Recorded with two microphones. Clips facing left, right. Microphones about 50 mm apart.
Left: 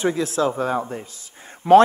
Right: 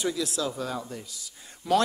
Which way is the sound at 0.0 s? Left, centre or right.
Left.